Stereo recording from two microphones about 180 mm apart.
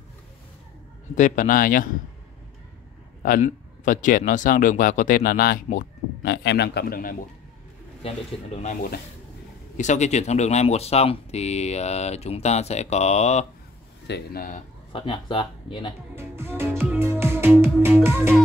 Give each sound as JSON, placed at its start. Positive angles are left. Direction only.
{"t": 1.1, "sound": "a man's voice", "side_deg": 45}
{"t": 3.2, "sound": "a man's voice", "side_deg": 50}
{"t": 8.6, "sound": "a man's voice", "side_deg": 55}
{"t": 9.8, "sound": "speech", "side_deg": 40}
{"t": 14.0, "sound": "speech", "side_deg": 65}
{"t": 14.9, "sound": "speech", "side_deg": 30}
{"t": 16.2, "sound": "music", "side_deg": -15}